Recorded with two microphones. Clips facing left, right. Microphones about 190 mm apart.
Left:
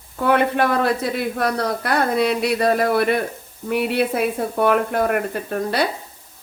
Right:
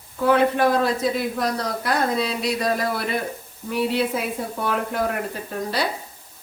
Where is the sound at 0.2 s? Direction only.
60° left (ahead or behind).